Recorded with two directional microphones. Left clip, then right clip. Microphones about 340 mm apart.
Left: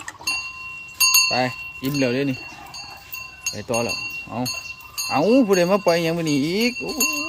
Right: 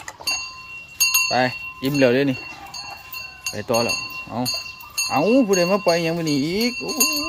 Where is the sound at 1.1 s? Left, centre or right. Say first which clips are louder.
Left 1 dB; centre.